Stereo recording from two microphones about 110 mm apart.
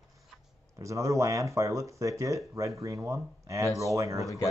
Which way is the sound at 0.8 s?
30° right (ahead or behind).